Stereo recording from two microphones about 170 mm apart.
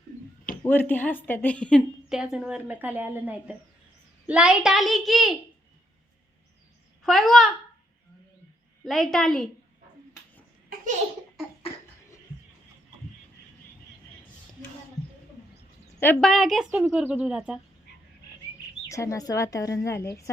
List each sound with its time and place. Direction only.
0.6 s a woman's voice: 10° left (ahead or behind)
7.0 s a child's voice: centre (ahead or behind)
8.8 s a child's voice: centre (ahead or behind)
16.0 s a woman's voice: 10° left (ahead or behind)
16.3 s a child's voice: centre (ahead or behind)
18.9 s a woman's voice: 20° left (ahead or behind)